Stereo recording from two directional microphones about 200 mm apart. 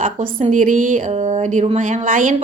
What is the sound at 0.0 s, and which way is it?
A woman's voice, 40° right (ahead or behind).